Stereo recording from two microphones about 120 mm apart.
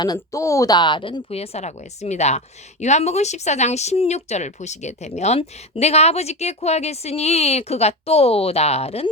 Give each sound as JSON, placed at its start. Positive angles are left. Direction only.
{"t": 0.0, "sound": "a woman's voice", "side_deg": 30}